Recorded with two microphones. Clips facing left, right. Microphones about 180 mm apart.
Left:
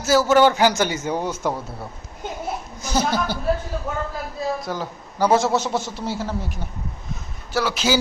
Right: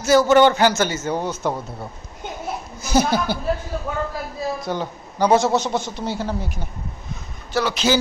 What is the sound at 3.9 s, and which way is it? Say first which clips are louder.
A man's voice: right 3 dB; centre (ahead or behind).